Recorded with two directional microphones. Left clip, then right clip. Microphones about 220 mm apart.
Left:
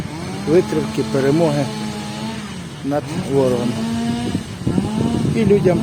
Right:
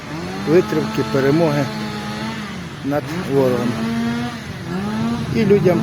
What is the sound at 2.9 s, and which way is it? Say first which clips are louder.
Speech: even; centre (ahead or behind).